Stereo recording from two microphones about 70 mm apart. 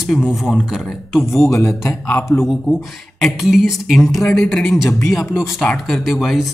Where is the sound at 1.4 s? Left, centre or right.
Left.